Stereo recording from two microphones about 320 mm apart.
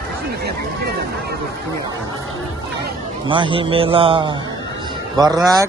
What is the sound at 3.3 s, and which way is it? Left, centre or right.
A man's voice, centre.